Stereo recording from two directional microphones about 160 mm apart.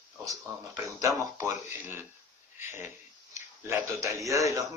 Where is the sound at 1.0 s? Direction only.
20° right (ahead or behind).